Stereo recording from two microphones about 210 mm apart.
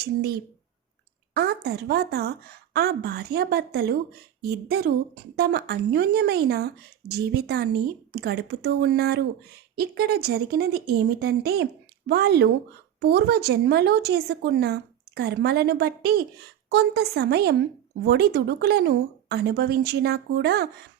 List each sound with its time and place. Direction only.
1.3 s a woman's voice: 50° right (ahead or behind)